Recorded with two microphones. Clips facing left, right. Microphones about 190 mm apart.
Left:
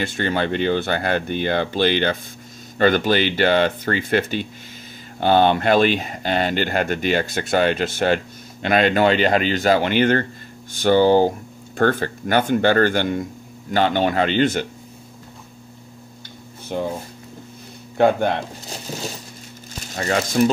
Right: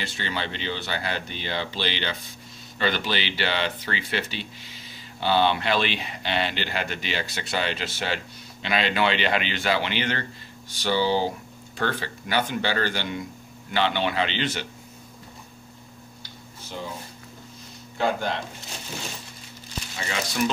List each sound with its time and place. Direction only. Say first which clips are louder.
0.0 s speech: left 9 dB; 50° left (ahead or behind)
16.6 s speech: left 11 dB; 55° left (ahead or behind)
17.9 s speech: left 9 dB; 55° left (ahead or behind)
19.9 s speech: left 10 dB; 50° left (ahead or behind)